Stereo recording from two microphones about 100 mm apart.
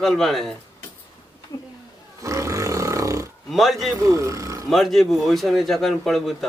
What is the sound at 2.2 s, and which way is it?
Roar, 30° right (ahead or behind).